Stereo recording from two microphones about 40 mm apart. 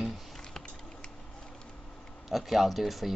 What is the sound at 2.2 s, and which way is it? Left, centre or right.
Speech, centre.